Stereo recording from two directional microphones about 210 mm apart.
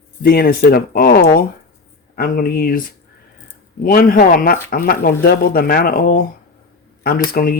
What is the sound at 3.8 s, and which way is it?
Speech, 40° left (ahead or behind).